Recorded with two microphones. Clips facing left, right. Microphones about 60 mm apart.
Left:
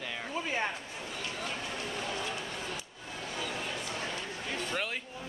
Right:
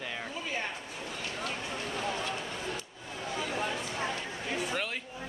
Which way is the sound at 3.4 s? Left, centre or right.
Right.